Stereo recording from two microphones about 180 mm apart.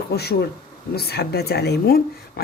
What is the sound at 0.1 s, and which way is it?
Speech, 65° left (ahead or behind).